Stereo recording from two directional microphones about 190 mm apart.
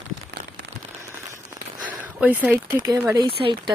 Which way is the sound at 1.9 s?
10° right (ahead or behind).